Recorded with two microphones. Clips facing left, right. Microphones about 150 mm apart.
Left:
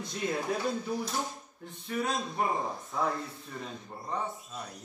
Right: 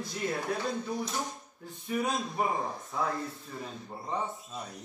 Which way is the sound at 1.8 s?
10° right (ahead or behind).